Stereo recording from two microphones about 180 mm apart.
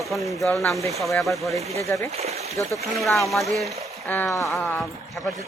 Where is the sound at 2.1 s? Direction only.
35° right (ahead or behind).